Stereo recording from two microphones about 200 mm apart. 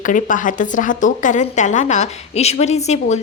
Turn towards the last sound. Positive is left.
turn(degrees=35)  # may be behind; listen again after turning